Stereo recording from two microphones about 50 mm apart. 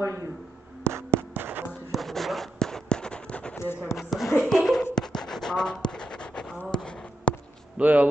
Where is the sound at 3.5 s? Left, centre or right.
Left.